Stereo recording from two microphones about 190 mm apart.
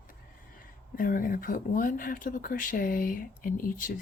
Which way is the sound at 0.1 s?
45° left (ahead or behind).